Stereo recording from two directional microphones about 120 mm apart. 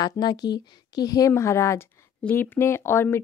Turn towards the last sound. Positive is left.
turn(degrees=20)  # may be behind; listen again after turning